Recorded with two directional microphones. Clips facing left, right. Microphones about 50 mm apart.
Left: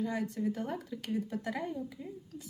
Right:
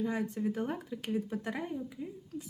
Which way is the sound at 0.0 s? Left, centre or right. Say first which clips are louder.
Right 1 dB; right.